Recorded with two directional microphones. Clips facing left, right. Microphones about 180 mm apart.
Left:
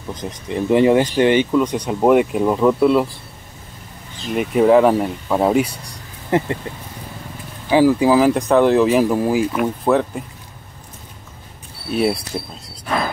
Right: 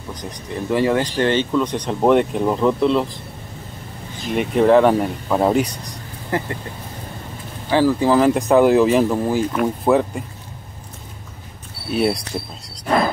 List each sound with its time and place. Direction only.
0.1 s speech: 20° left (ahead or behind)
4.4 s speech: 5° left (ahead or behind)
6.3 s speech: 20° left (ahead or behind)
7.7 s speech: 10° left (ahead or behind)
11.9 s speech: centre (ahead or behind)